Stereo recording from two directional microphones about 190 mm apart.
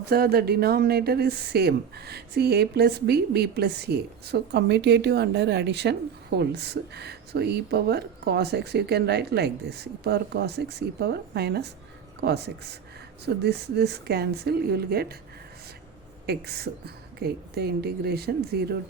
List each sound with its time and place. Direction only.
0.0 s speech: 55° right (ahead or behind)
16.2 s speech: 55° right (ahead or behind)